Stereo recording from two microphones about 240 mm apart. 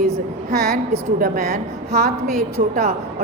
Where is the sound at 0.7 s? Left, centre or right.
Right.